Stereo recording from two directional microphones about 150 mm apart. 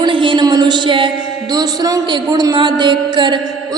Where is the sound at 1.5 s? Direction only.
25° right (ahead or behind).